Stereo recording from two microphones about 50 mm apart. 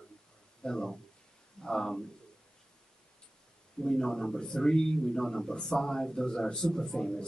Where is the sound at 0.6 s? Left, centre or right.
Centre.